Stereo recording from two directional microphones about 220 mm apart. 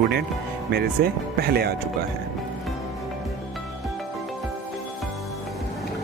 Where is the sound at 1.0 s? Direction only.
45° right (ahead or behind).